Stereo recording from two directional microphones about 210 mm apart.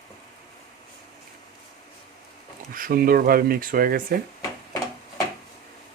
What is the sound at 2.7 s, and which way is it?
Speech, 40° right (ahead or behind).